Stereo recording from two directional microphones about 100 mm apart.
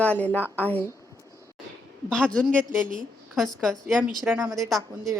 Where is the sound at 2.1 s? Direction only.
5° left (ahead or behind).